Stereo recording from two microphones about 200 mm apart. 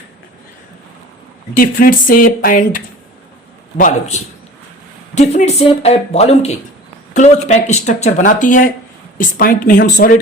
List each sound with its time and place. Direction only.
1.5 s speech: 45° left (ahead or behind)